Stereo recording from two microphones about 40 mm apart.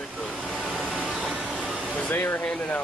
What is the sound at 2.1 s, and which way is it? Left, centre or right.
Speech, left.